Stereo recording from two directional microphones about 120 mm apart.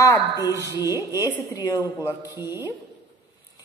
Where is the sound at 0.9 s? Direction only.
20° right (ahead or behind).